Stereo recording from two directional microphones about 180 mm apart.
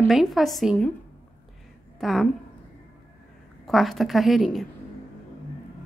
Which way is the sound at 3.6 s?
Centre (ahead or behind).